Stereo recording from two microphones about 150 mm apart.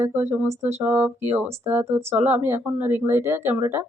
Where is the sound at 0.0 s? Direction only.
15° right (ahead or behind).